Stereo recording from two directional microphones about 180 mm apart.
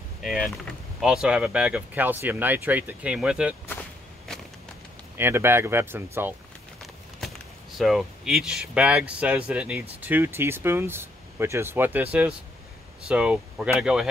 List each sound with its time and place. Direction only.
0.2 s speech: centre (ahead or behind)
5.1 s speech: 15° right (ahead or behind)
7.7 s speech: centre (ahead or behind)